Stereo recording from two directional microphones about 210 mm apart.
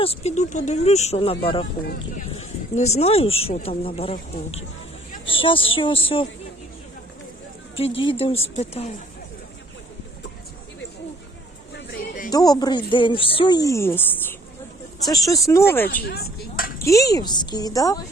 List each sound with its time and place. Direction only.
0.0 s speech: 30° left (ahead or behind)
1.9 s speech: 45° left (ahead or behind)
2.3 s speech: 30° left (ahead or behind)
5.2 s a sound: 25° left (ahead or behind)
5.7 s speech: 25° left (ahead or behind)
7.8 s speech: 25° left (ahead or behind)
12.3 s a woman's voice: 15° left (ahead or behind)
15.9 s speech: 50° left (ahead or behind)
16.6 s a sound: 45° left (ahead or behind)
16.8 s a woman's voice: 15° left (ahead or behind)